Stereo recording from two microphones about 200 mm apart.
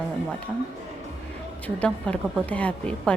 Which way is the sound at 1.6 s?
5° left (ahead or behind).